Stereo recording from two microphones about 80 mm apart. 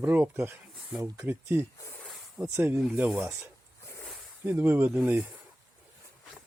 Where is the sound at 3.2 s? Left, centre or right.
Right.